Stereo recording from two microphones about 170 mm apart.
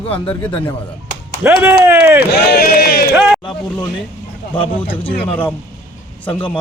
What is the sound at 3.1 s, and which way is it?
Speech, 5° right (ahead or behind).